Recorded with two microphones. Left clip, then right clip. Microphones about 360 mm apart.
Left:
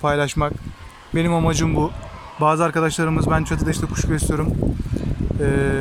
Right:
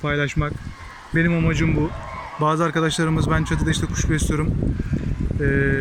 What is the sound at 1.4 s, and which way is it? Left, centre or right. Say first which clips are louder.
Speech: left 2 dB; centre.